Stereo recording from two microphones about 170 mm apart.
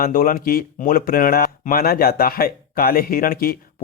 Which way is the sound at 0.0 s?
55° left (ahead or behind).